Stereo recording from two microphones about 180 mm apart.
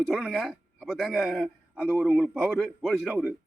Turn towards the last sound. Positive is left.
turn(degrees=0)  # may be behind; listen again after turning